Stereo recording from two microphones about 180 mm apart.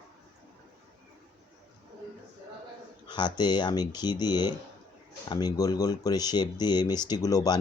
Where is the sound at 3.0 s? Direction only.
25° left (ahead or behind).